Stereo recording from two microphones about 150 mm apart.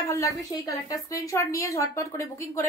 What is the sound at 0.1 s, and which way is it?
A woman's voice, 20° left (ahead or behind).